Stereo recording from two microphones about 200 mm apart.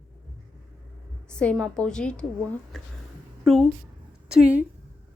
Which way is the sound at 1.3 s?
5° left (ahead or behind).